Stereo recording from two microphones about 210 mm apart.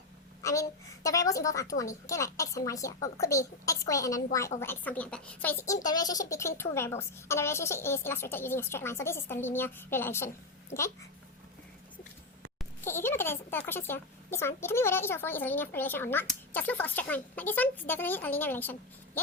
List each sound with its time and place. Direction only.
0.4 s speech: 15° left (ahead or behind)
12.8 s speech: 10° left (ahead or behind)